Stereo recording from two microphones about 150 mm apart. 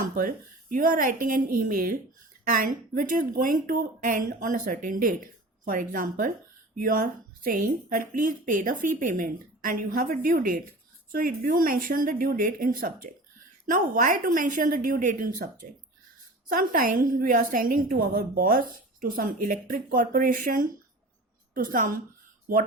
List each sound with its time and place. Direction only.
0.0 s a woman's voice: 65° right (ahead or behind)
16.5 s a woman's voice: 65° right (ahead or behind)
22.5 s speech: 80° right